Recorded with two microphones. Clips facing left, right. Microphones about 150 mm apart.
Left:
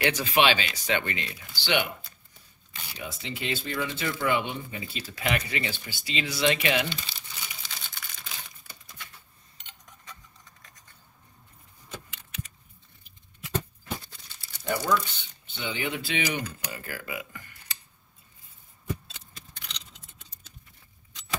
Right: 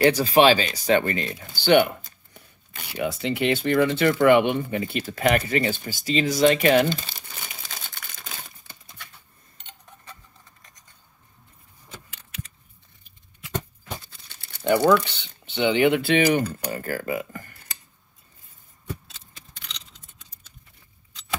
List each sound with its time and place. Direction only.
0.0 s speech: 35° right (ahead or behind)
14.3 s speech: 60° right (ahead or behind)
16.4 s speech: 45° right (ahead or behind)